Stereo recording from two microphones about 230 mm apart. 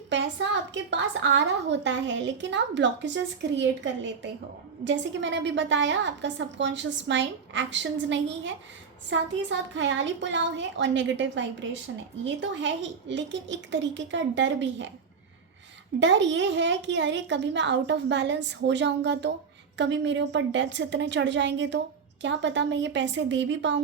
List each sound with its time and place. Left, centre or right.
0.1 s a woman's voice: right
16.0 s a woman's voice: right